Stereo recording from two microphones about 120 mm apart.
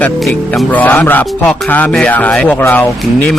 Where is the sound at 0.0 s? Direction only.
5° left (ahead or behind).